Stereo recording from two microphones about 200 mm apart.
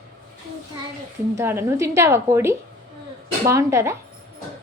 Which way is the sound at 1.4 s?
10° right (ahead or behind).